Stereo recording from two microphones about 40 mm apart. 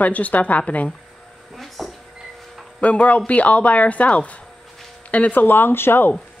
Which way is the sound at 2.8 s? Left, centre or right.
Left.